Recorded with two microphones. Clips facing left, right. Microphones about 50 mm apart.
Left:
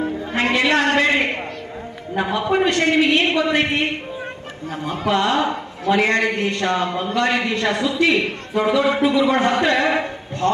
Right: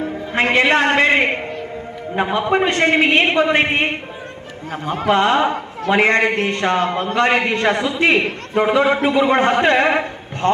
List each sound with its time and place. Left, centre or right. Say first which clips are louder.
0.3 s a man's voice: right 3 dB; right